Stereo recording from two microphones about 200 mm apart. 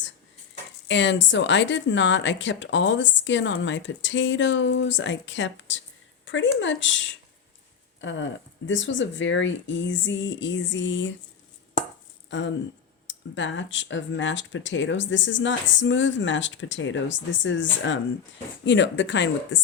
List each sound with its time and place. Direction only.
0.9 s speech: 65° left (ahead or behind)
8.0 s speech: 65° left (ahead or behind)
12.3 s speech: 65° left (ahead or behind)